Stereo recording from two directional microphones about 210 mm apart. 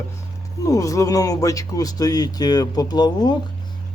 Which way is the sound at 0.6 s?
15° left (ahead or behind).